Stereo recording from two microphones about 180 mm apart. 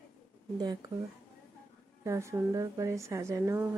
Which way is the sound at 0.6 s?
20° right (ahead or behind).